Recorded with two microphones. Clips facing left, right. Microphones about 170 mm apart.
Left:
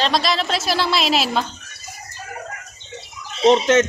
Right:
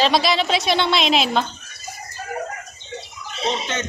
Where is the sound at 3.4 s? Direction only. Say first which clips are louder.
Left 11 dB; 90° left.